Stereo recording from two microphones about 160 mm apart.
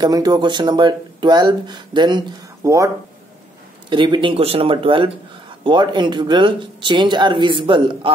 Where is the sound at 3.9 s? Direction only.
30° right (ahead or behind).